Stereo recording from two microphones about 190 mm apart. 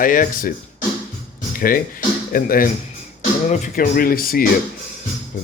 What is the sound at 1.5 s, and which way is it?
Speech, 50° left (ahead or behind).